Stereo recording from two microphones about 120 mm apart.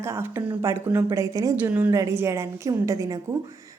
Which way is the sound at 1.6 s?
15° right (ahead or behind).